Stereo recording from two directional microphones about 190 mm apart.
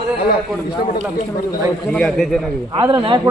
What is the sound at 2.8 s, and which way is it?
Speech, 25° right (ahead or behind).